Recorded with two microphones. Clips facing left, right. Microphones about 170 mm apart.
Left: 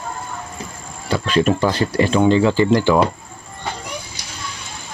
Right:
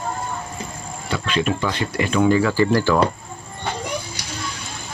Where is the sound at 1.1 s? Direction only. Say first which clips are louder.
Left 5 dB; 40° left (ahead or behind); by 2.9 s 20° left (ahead or behind).